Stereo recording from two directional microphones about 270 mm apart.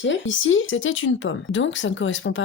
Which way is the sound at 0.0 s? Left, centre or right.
Left.